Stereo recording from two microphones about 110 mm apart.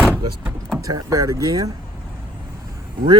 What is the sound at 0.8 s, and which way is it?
Speech, 30° right (ahead or behind).